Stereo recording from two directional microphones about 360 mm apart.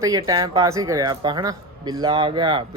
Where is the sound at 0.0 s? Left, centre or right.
Centre.